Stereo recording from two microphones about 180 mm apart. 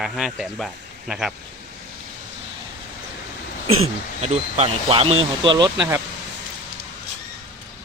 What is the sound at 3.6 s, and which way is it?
Speech, 35° right (ahead or behind).